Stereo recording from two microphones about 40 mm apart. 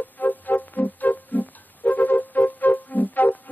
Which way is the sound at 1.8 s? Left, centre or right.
Left.